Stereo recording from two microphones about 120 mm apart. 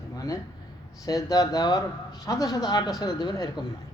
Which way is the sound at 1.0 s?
30° left (ahead or behind).